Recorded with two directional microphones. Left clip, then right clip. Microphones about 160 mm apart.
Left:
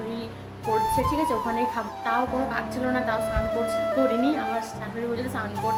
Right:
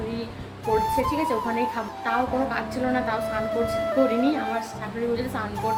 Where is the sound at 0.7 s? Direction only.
Centre (ahead or behind).